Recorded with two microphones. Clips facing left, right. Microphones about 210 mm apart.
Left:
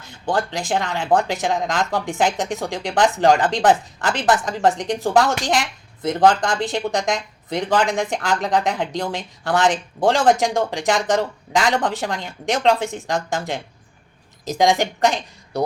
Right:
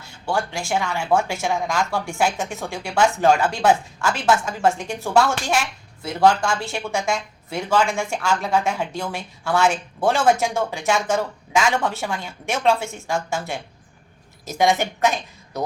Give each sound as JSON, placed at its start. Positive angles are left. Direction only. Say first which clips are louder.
{"t": 0.0, "sound": "speech", "louder": "left 2 dB", "side_deg": 20}